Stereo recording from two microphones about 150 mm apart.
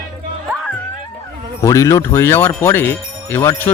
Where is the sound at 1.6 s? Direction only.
20° left (ahead or behind).